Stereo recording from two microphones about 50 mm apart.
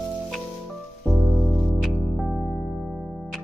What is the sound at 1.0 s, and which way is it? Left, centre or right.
Music, centre.